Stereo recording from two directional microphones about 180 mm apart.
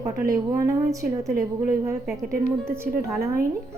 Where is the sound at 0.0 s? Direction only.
20° right (ahead or behind).